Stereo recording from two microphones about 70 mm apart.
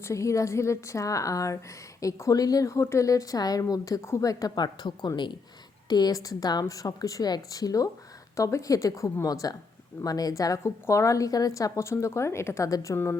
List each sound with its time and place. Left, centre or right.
0.0 s speech: left
2.4 s a woman's voice: left
4.5 s speech: left
5.9 s a woman's voice: left
10.6 s speech: left